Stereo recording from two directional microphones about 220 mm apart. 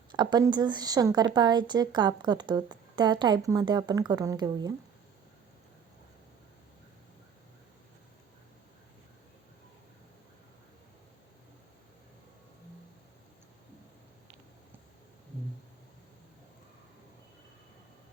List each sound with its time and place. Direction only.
0.1 s a woman's voice: 20° right (ahead or behind)